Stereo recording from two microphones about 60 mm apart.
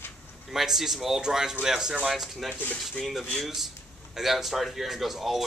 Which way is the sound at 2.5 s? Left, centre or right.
Left.